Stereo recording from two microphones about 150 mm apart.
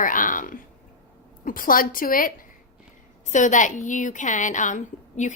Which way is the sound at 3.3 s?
55° left (ahead or behind).